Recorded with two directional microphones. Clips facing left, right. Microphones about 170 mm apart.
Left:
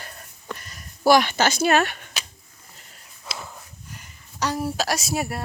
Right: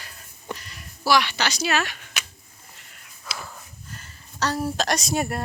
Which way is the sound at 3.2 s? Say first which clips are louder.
Left 1 dB; 20° left (ahead or behind).